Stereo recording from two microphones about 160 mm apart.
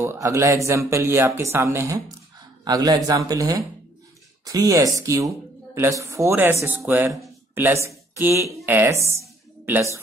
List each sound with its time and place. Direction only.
0.0 s speech: 15° right (ahead or behind)